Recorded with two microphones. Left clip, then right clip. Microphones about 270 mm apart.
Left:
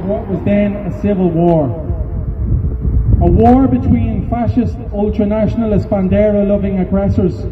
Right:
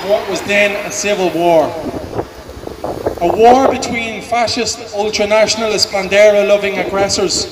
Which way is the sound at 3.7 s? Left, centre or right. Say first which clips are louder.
Even; centre.